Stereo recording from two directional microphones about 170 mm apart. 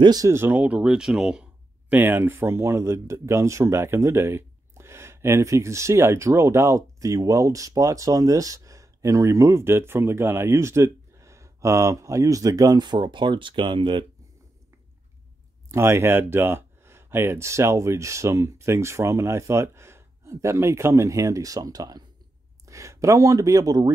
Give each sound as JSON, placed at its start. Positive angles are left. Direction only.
{"t": 0.0, "sound": "speech", "side_deg": -20}
{"t": 15.7, "sound": "speech", "side_deg": -15}